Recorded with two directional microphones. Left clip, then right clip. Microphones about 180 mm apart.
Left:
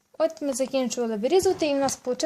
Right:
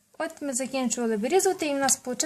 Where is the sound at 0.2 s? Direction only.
30° left (ahead or behind).